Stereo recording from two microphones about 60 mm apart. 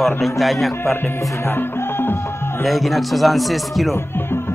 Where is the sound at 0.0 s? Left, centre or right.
Centre.